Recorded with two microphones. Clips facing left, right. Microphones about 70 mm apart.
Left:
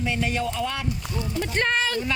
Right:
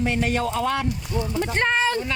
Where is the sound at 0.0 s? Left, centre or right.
Right.